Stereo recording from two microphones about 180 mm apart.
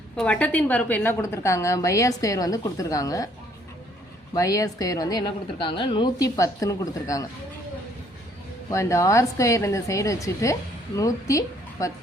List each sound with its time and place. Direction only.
0.2 s a woman's voice: 5° left (ahead or behind)
4.4 s a woman's voice: 20° left (ahead or behind)
8.7 s a woman's voice: 15° left (ahead or behind)